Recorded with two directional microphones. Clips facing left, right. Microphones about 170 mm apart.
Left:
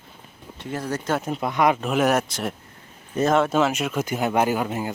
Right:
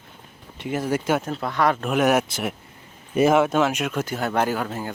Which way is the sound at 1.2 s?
15° left (ahead or behind).